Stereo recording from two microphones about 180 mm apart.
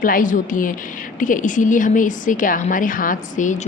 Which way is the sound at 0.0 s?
50° left (ahead or behind).